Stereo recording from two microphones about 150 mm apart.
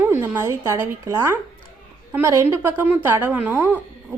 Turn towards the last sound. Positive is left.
turn(degrees=-15)  # may be behind; listen again after turning